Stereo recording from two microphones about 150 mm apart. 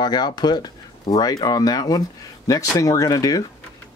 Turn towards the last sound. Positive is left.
turn(degrees=25)  # may be behind; listen again after turning